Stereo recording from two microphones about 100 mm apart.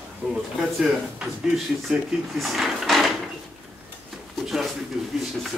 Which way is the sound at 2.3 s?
Centre (ahead or behind).